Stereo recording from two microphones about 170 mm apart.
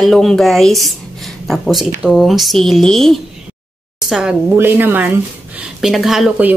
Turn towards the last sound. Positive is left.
turn(degrees=-5)  # may be behind; listen again after turning